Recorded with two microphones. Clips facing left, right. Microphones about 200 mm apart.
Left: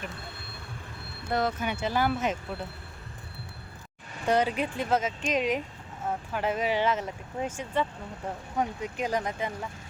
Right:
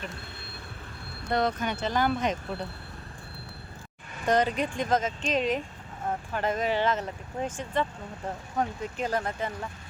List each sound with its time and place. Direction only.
1.3 s speech: 5° left (ahead or behind)
4.3 s speech: 10° left (ahead or behind)